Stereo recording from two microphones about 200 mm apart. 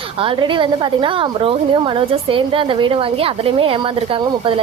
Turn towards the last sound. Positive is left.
turn(degrees=-25)  # may be behind; listen again after turning